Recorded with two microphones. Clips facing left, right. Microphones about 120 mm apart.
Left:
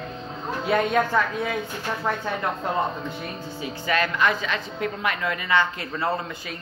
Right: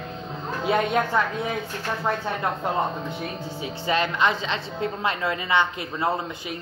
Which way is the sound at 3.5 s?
25° right (ahead or behind).